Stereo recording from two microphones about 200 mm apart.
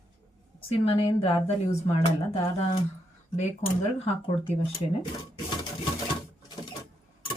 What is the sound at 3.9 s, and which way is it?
Speech, 30° left (ahead or behind).